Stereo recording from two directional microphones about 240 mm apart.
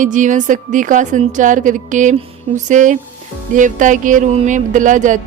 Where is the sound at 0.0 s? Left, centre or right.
Right.